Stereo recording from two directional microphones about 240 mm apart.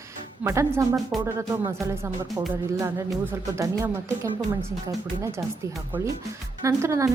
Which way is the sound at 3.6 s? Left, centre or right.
Centre.